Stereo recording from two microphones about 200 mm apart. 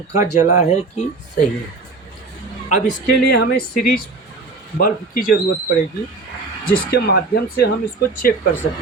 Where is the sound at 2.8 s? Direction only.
50° left (ahead or behind).